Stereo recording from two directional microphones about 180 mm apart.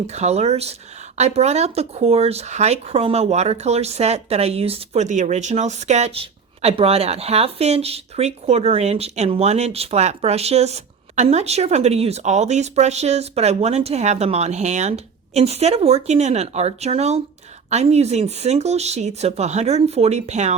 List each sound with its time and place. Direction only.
0.1 s speech: 35° right (ahead or behind)